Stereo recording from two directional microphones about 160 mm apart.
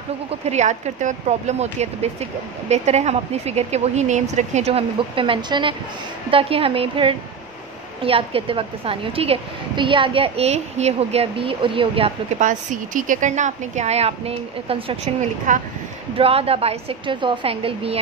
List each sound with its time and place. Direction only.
0.5 s a woman's voice: 45° right (ahead or behind)
12.4 s speech: 55° right (ahead or behind); by 15.0 s 35° right (ahead or behind)
15.5 s speech: 50° right (ahead or behind)
16.2 s a woman's voice: 35° right (ahead or behind)